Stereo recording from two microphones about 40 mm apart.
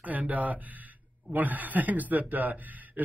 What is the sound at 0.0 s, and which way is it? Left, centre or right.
Speech, right.